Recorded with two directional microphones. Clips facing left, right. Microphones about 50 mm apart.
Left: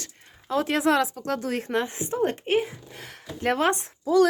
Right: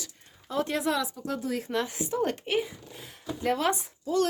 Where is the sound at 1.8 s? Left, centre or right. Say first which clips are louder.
Left 3 dB; left.